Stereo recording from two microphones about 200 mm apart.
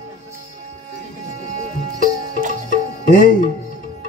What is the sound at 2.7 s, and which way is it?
Music, 40° left (ahead or behind).